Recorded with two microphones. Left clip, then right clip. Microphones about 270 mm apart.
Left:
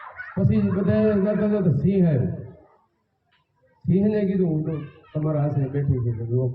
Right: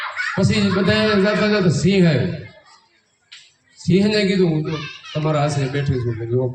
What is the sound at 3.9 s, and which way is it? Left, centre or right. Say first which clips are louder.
Speech: right 5 dB; right.